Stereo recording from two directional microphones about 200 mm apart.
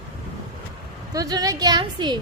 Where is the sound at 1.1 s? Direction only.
20° right (ahead or behind).